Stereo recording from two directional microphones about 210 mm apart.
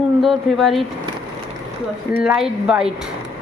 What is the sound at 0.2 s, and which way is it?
Speech, centre (ahead or behind).